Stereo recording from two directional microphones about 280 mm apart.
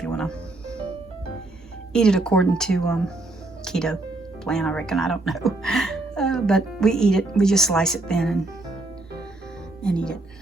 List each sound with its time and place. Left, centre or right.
0.0 s music: centre
1.9 s speech: centre
3.6 s music: centre
4.4 s speech: centre
9.8 s speech: centre